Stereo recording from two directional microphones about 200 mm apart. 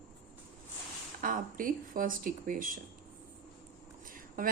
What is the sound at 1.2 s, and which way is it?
A woman's voice, 45° right (ahead or behind).